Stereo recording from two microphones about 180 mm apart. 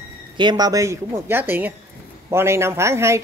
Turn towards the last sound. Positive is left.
turn(degrees=-15)  # may be behind; listen again after turning